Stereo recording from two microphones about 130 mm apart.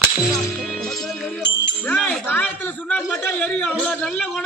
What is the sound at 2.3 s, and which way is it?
A man's voice, 15° left (ahead or behind).